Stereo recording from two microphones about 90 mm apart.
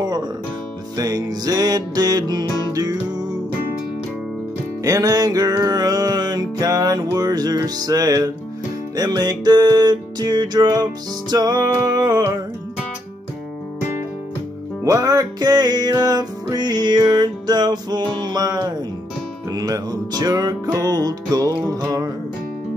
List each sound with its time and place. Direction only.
0.9 s music: 45° right (ahead or behind)
4.8 s music: 45° right (ahead or behind)
14.9 s music: 45° right (ahead or behind)